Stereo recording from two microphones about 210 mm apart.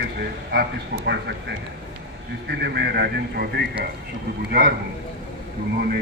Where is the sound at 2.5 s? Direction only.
50° right (ahead or behind).